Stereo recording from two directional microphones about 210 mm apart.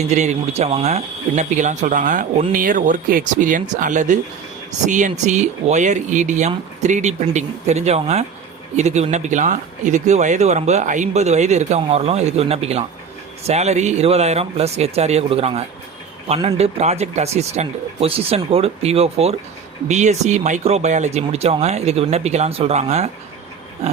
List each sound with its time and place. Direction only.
0.0 s speech: 30° right (ahead or behind)